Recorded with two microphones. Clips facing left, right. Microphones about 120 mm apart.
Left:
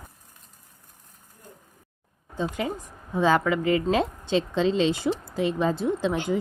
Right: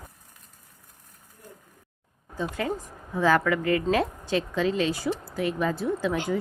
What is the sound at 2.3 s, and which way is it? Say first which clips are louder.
Speech: left 1 dB; 20° left (ahead or behind).